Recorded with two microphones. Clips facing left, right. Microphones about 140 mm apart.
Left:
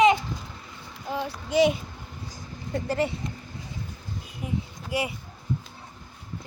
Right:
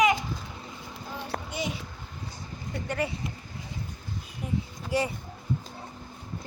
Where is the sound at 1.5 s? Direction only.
90° left.